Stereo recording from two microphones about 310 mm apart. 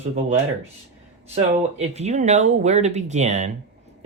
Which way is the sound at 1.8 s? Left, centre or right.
Right.